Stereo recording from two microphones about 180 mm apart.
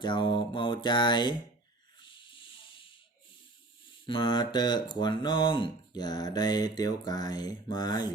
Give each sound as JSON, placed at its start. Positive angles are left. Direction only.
{"t": 0.0, "sound": "speech", "side_deg": 25}
{"t": 2.0, "sound": "a sound", "side_deg": 25}
{"t": 4.0, "sound": "speech", "side_deg": 25}